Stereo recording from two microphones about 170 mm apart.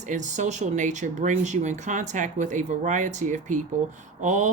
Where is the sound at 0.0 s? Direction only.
45° right (ahead or behind).